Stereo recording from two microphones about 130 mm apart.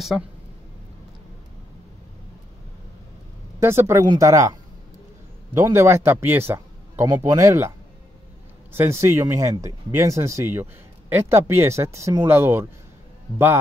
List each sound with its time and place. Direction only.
3.5 s a man's voice: 20° right (ahead or behind)
8.7 s speech: 20° right (ahead or behind)